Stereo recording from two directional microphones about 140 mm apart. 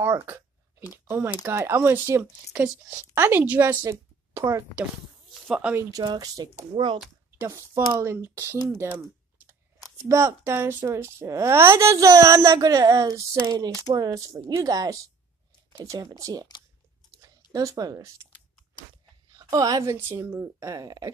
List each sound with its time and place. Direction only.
0.0 s speech: 20° right (ahead or behind)
5.3 s a sound: 10° right (ahead or behind)
5.8 s a woman's voice: 25° right (ahead or behind)
7.2 s a woman's voice: 15° right (ahead or behind)
10.0 s a woman's voice: 20° right (ahead or behind)
17.5 s a woman's voice: 25° right (ahead or behind)
19.3 s a woman's voice: 25° right (ahead or behind)